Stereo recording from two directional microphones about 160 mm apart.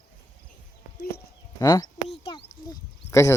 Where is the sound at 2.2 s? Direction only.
30° left (ahead or behind).